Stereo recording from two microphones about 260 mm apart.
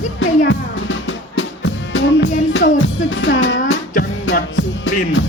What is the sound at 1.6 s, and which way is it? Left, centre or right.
Music, left.